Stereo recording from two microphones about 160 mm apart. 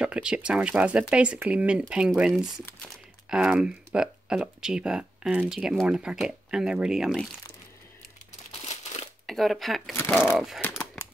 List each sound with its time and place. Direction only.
0.0 s speech: 5° right (ahead or behind)
8.6 s crumpling: 45° left (ahead or behind)
9.2 s speech: centre (ahead or behind)
10.6 s typewriter: 20° left (ahead or behind)